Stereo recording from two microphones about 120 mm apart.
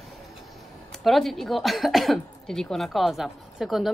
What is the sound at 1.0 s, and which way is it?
Speech, centre (ahead or behind).